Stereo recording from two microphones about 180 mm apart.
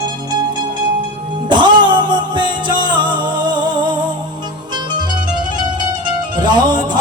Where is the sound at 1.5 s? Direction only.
25° right (ahead or behind).